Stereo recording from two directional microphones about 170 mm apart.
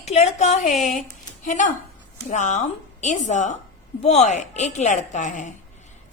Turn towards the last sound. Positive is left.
turn(degrees=45)  # may be behind; listen again after turning